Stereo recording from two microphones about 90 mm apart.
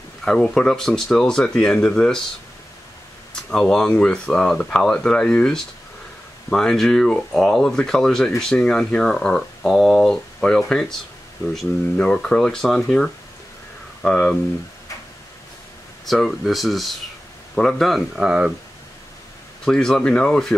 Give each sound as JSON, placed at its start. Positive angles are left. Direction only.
{"t": 0.2, "sound": "speech", "side_deg": 5}
{"t": 3.3, "sound": "speech", "side_deg": 5}
{"t": 12.0, "sound": "speech", "side_deg": 10}
{"t": 16.1, "sound": "speech", "side_deg": 0}
{"t": 18.1, "sound": "speech", "side_deg": -10}
{"t": 19.6, "sound": "speech", "side_deg": 5}